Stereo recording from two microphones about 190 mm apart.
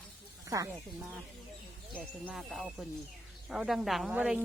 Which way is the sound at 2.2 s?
Centre (ahead or behind).